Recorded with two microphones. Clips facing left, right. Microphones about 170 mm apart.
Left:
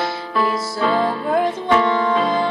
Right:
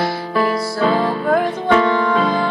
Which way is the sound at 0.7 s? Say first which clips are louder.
Right 1 dB; 55° right (ahead or behind).